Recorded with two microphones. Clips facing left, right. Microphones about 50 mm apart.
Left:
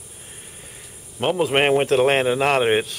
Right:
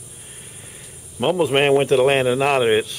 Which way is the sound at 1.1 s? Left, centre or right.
Centre.